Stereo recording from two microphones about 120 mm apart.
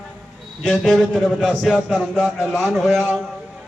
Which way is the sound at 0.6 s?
5° left (ahead or behind).